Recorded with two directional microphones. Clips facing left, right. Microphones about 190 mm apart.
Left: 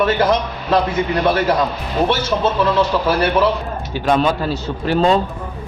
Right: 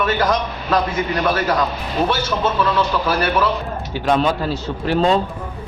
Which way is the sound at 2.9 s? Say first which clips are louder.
Left 3 dB; 25° left (ahead or behind).